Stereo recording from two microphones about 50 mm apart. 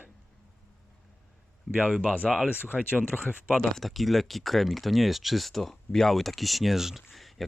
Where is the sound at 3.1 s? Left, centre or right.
Centre.